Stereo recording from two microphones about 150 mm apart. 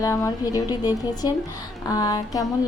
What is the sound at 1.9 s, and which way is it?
Speech, 25° left (ahead or behind).